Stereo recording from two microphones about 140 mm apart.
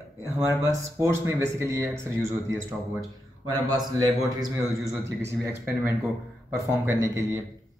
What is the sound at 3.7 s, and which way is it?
A man's voice, 25° right (ahead or behind).